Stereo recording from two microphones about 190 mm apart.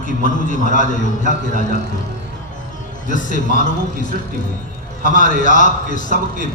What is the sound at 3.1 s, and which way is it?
Speech, 40° left (ahead or behind).